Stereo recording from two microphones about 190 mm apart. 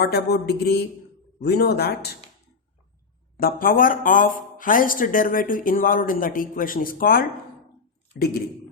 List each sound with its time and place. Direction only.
0.0 s speech: 60° left (ahead or behind)
3.3 s speech: 50° left (ahead or behind)